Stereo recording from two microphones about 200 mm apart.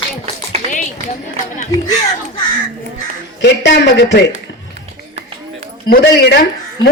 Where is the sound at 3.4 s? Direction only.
60° left (ahead or behind).